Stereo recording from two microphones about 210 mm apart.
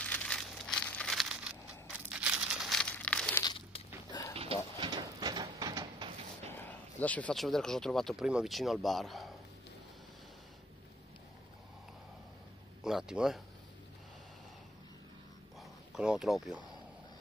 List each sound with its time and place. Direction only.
0.0 s crumpling: 5° left (ahead or behind)
3.4 s a sound: 20° left (ahead or behind)
4.4 s a sound: 25° right (ahead or behind)
6.5 s speech: 10° left (ahead or behind)
12.8 s speech: 5° right (ahead or behind)
15.9 s speech: 5° right (ahead or behind)